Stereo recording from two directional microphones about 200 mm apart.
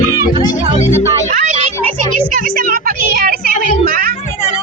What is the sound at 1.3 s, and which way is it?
Music, 35° right (ahead or behind).